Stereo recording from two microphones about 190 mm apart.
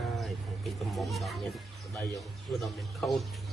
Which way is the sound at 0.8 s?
Centre (ahead or behind).